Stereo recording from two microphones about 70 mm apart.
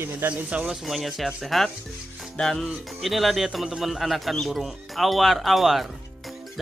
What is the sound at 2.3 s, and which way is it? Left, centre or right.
Music, centre.